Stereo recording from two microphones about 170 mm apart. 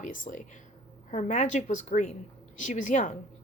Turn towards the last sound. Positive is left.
turn(degrees=45)  # may be behind; listen again after turning